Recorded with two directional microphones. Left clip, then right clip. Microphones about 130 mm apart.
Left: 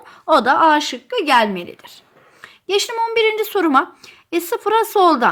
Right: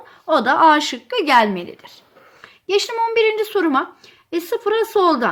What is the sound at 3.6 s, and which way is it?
Speech, 45° left (ahead or behind).